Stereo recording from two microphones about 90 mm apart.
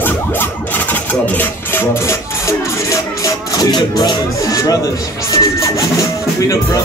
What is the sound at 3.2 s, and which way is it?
Speech, 45° left (ahead or behind).